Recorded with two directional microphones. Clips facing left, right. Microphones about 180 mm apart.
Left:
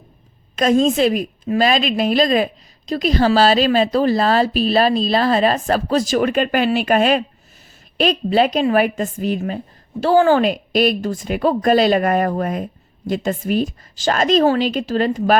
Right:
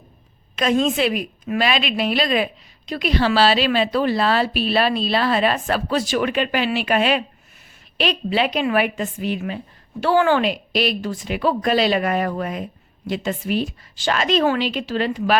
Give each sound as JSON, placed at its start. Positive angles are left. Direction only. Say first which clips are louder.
{"t": 0.5, "sound": "a woman's voice", "louder": "left 4 dB", "side_deg": 45}